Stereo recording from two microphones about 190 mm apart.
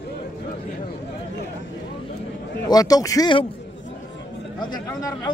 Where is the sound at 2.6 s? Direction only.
20° left (ahead or behind).